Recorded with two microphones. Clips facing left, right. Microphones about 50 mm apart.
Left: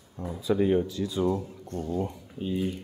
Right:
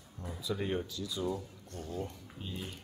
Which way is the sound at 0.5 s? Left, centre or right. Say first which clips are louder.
Left 12 dB; centre.